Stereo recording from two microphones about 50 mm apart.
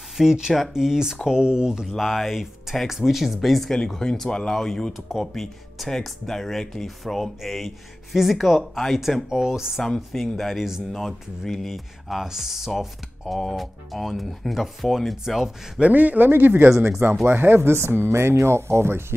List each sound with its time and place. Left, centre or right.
0.2 s speech: centre
2.0 s speech: centre
3.7 s speech: centre
4.9 s speech: centre
9.3 s speech: centre
9.8 s speech: centre
15.8 s a man's voice: right